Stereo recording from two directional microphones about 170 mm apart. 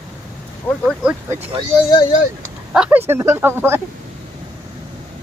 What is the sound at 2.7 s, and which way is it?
Speech, 5° right (ahead or behind).